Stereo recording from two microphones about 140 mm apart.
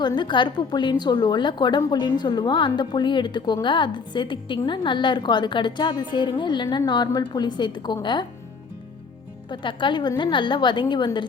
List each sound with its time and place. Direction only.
0.0 s a woman's voice: 35° left (ahead or behind)
9.5 s a woman's voice: 35° left (ahead or behind)